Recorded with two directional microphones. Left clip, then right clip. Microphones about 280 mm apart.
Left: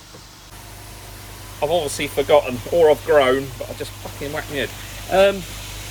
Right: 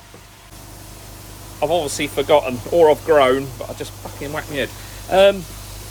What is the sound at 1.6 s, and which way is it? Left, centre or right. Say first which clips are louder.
Speech: right 1 dB; centre.